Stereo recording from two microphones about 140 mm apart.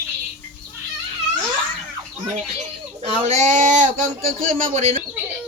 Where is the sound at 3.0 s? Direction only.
45° right (ahead or behind).